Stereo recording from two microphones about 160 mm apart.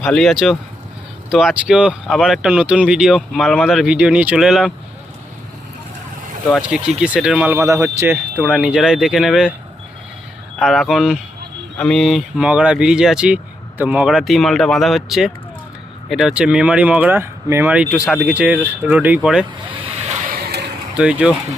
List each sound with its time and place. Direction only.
0.0 s speech: 5° left (ahead or behind)
6.5 s speech: 5° right (ahead or behind)
8.4 s speech: centre (ahead or behind)
10.6 s speech: centre (ahead or behind)
20.0 s a sound: 45° right (ahead or behind)
20.3 s a sound: 85° right
20.9 s speech: 5° right (ahead or behind)